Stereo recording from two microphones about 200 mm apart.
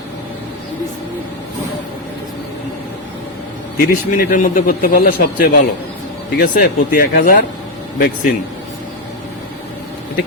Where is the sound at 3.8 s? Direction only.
40° left (ahead or behind).